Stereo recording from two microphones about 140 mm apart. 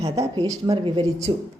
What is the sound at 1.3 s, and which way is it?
Speech, 35° right (ahead or behind).